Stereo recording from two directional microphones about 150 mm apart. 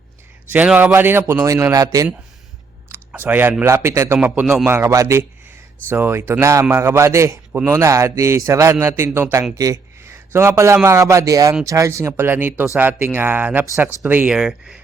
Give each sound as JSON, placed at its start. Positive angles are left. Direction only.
{"t": 0.5, "sound": "a man's voice", "side_deg": -10}
{"t": 2.9, "sound": "clicking", "side_deg": -15}
{"t": 3.6, "sound": "a man's voice", "side_deg": -20}
{"t": 4.2, "sound": "a man's voice", "side_deg": -5}
{"t": 4.7, "sound": "a man's voice", "side_deg": -20}